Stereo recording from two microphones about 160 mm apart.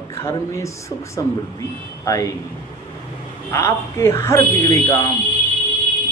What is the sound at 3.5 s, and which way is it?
Speech, 15° left (ahead or behind).